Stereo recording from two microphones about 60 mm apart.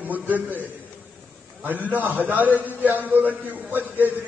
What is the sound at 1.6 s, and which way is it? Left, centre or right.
A man's voice, right.